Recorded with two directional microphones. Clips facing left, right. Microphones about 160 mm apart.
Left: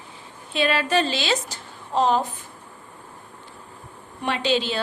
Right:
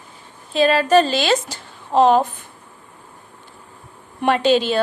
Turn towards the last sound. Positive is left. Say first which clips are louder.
# right 7 dB
turn(degrees=-50)  # may be behind; listen again after turning